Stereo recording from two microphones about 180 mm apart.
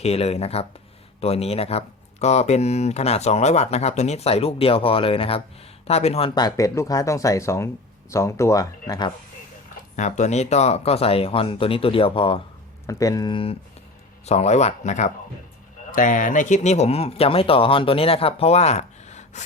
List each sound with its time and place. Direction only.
0.0 s speech: 35° left (ahead or behind)
9.9 s speech: 40° left (ahead or behind)
12.9 s speech: 20° left (ahead or behind); by 19.5 s 40° left (ahead or behind)